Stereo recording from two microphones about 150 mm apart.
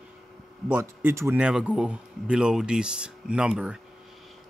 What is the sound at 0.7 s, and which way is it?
A man's voice, 15° right (ahead or behind).